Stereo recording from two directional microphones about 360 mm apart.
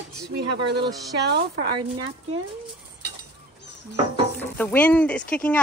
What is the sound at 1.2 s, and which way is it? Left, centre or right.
Speech, right.